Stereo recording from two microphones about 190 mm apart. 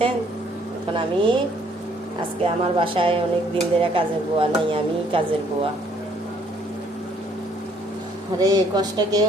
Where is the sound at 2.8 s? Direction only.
30° right (ahead or behind).